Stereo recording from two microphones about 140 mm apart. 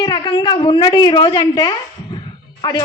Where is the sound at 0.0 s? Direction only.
35° left (ahead or behind).